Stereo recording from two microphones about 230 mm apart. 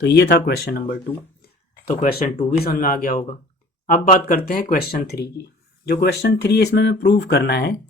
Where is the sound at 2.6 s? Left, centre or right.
Left.